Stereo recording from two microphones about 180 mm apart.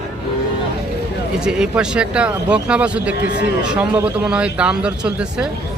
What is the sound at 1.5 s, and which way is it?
Speech, 5° right (ahead or behind).